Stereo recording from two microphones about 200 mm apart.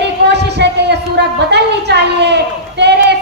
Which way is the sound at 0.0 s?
55° right (ahead or behind).